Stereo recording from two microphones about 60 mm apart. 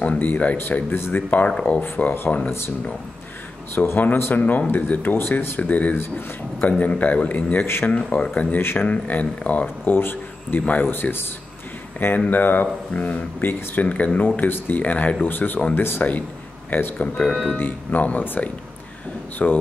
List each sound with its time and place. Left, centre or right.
0.0 s speech: left
3.7 s speech: left
5.6 s speech: left
5.9 s speech: left
6.8 s speech: left
7.6 s speech: left
8.8 s speech: left
9.9 s speech: left
12.3 s speech: left
15.2 s speech: left
17.2 s speech: centre
17.5 s speech: left